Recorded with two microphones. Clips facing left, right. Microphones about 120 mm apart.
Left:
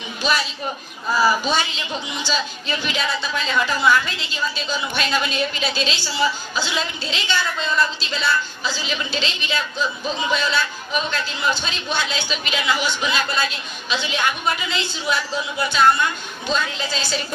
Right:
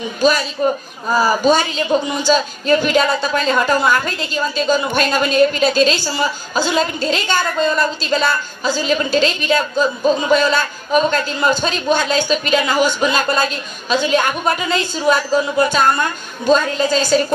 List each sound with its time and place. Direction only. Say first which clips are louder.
0.2 s a man's voice: right 8 dB; 45° right (ahead or behind)